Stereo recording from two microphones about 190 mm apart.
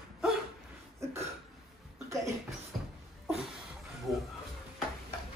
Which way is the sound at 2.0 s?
15° right (ahead or behind).